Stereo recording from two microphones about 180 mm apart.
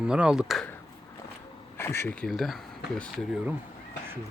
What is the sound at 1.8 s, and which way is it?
Speech, 15° left (ahead or behind).